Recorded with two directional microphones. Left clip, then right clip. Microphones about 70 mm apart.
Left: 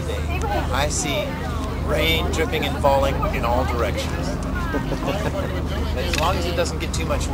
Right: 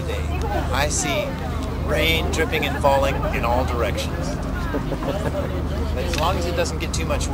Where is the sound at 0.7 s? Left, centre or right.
Centre.